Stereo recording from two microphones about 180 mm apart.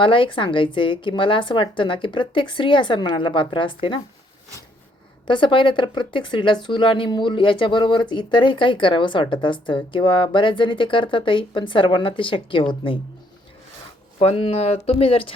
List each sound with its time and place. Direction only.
0.0 s speech: 30° left (ahead or behind)
5.2 s speech: 25° left (ahead or behind)
14.2 s speech: 35° left (ahead or behind)